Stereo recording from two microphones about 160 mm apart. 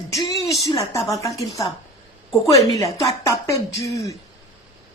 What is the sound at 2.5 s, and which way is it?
A woman's voice, 20° left (ahead or behind).